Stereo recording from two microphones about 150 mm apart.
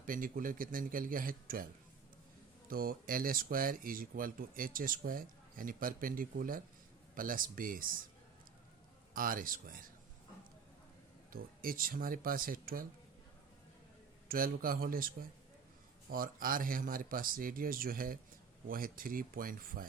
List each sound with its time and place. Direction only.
0.0 s speech: 65° right (ahead or behind)
2.6 s speech: 75° right (ahead or behind)
9.1 s speech: 70° right (ahead or behind)
11.3 s speech: 75° right (ahead or behind)
14.3 s speech: 70° right (ahead or behind)